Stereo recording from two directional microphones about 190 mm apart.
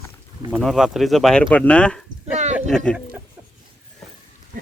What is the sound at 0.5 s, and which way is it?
Speech, centre (ahead or behind).